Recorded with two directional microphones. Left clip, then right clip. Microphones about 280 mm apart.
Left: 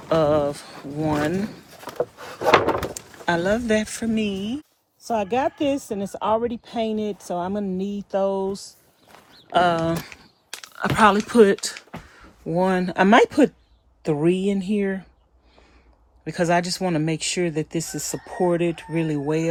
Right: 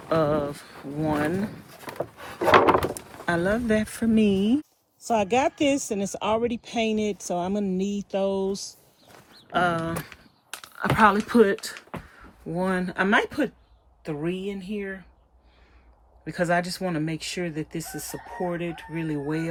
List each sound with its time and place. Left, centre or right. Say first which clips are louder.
0.1 s speech: left 4 dB; centre
2.9 s speech: left 3 dB; centre
5.0 s speech: even; centre
16.2 s speech: left 3 dB; centre